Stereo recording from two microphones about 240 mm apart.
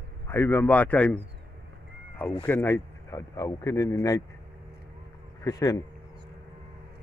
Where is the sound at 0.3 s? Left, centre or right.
Centre.